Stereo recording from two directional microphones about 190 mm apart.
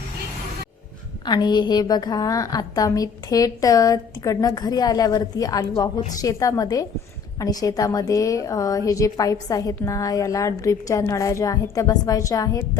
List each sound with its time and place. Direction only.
1.2 s a woman's voice: 20° left (ahead or behind)